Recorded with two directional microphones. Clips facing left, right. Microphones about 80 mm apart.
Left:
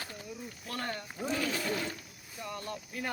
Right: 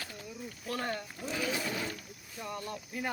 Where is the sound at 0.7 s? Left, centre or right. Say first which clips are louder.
Right 2 dB; centre.